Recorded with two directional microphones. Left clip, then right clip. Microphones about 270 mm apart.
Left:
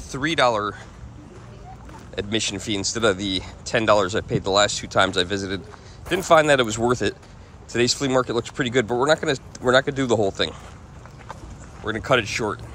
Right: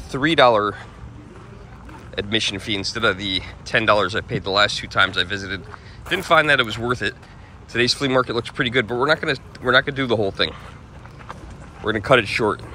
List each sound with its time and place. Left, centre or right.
0.1 s speech: centre
2.1 s speech: centre
11.8 s speech: centre